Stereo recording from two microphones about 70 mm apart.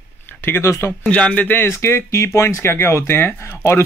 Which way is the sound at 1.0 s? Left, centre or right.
Centre.